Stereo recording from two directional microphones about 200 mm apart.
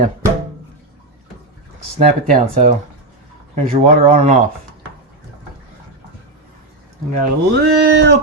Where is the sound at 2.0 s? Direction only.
45° right (ahead or behind).